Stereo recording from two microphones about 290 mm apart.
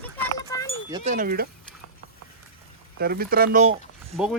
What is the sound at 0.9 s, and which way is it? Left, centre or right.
Speech, centre.